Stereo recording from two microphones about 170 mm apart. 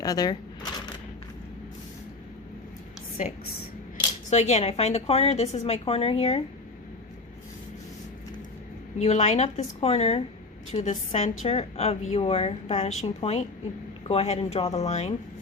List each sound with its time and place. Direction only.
0.0 s shuffling cards: 20° left (ahead or behind)
3.2 s a woman's voice: 45° left (ahead or behind)
9.0 s a woman's voice: 40° left (ahead or behind)